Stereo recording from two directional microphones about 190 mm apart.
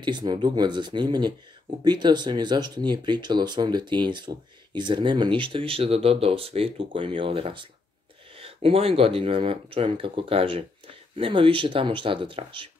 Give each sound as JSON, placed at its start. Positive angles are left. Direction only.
{"t": 0.0, "sound": "speech", "side_deg": -25}